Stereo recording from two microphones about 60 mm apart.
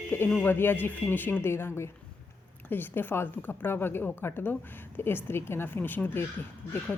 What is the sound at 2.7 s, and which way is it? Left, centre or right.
A woman's voice, left.